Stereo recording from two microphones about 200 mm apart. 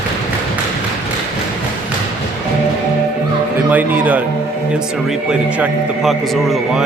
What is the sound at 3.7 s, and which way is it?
A man's voice, 10° right (ahead or behind).